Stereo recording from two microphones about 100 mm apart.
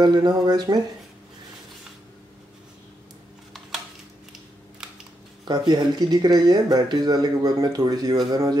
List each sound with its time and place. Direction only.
0.0 s speech: 45° right (ahead or behind)
5.4 s speech: 45° right (ahead or behind)